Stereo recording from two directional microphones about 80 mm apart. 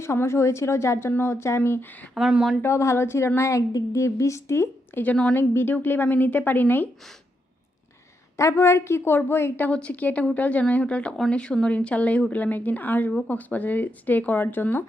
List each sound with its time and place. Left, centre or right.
0.0 s a woman's voice: left
2.1 s speech: centre
2.6 s a woman's voice: left
3.7 s a woman's voice: left
4.0 s a woman's voice: left
5.0 s a woman's voice: centre
8.4 s speech: left